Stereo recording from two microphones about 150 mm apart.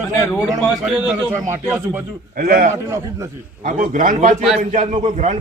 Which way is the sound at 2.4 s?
70° right (ahead or behind).